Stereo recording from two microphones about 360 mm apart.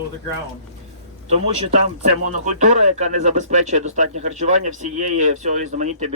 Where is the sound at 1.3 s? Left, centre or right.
Centre.